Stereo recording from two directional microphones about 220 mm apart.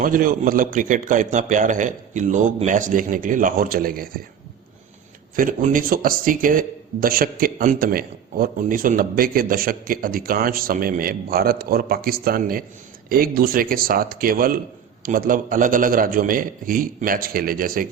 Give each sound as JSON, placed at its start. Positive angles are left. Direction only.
{"t": 0.0, "sound": "speech", "side_deg": -40}
{"t": 5.4, "sound": "speech", "side_deg": -40}